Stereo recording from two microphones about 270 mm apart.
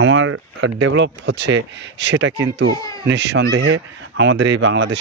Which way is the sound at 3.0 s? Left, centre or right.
Right.